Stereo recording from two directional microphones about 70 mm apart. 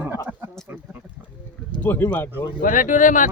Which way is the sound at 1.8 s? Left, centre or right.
Left.